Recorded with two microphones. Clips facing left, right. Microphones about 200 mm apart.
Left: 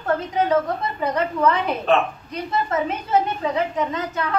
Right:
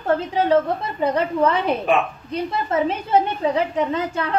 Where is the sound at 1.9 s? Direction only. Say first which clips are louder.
Left 1 dB; 10° right (ahead or behind).